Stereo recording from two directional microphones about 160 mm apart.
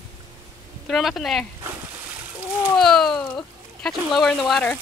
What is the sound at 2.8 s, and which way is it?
Speech, centre (ahead or behind).